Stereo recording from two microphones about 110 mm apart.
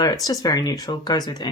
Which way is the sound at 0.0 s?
35° left (ahead or behind).